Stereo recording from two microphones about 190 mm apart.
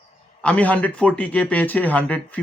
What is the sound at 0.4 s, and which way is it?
Speech, 5° left (ahead or behind).